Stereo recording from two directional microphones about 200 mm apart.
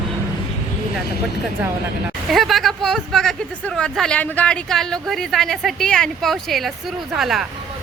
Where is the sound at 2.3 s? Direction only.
Centre (ahead or behind).